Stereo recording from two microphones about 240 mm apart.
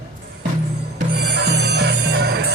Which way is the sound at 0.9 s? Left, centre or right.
Right.